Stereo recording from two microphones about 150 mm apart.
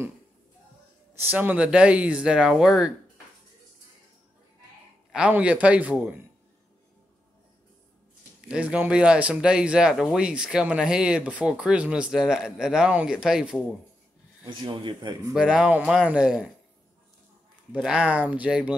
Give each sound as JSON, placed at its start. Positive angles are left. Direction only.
{"t": 1.2, "sound": "speech", "side_deg": -10}
{"t": 5.1, "sound": "speech", "side_deg": -5}
{"t": 8.5, "sound": "speech", "side_deg": -10}
{"t": 14.6, "sound": "speech", "side_deg": -30}
{"t": 15.3, "sound": "speech", "side_deg": -5}
{"t": 17.7, "sound": "speech", "side_deg": -5}